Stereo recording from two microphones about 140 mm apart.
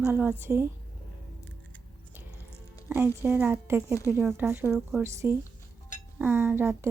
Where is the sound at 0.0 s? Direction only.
15° right (ahead or behind).